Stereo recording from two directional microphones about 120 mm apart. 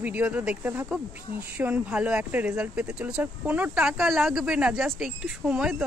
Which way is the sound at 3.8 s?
Centre (ahead or behind).